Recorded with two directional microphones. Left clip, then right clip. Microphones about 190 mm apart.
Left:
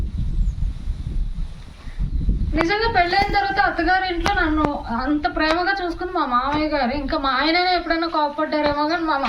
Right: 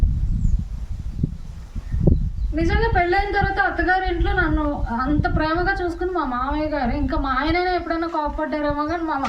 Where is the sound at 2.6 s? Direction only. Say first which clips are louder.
Left 2 dB; centre (ahead or behind).